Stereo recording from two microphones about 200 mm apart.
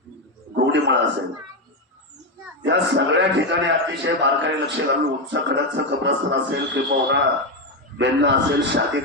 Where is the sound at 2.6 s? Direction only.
65° right (ahead or behind).